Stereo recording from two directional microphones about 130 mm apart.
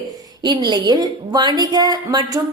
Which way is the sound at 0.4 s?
35° right (ahead or behind).